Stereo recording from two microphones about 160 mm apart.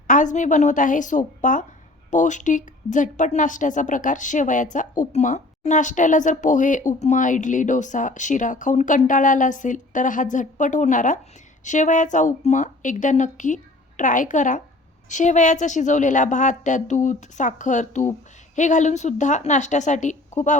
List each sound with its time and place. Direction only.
0.1 s a woman's voice: 55° left (ahead or behind)